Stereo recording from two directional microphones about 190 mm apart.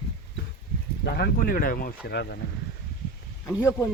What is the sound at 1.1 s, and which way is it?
Speech, 55° left (ahead or behind).